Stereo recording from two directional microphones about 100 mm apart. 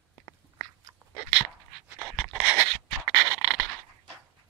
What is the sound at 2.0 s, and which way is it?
Dog, centre (ahead or behind).